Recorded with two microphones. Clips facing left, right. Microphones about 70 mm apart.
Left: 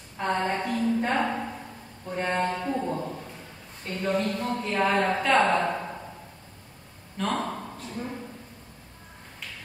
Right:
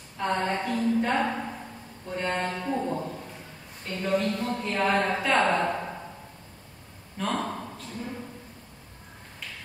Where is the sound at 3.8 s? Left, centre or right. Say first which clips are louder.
Even; centre.